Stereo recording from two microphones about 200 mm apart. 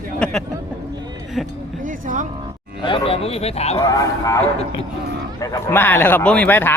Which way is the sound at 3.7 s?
15° left (ahead or behind).